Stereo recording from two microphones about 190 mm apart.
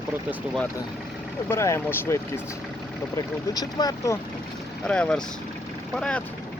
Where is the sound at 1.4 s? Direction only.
15° left (ahead or behind).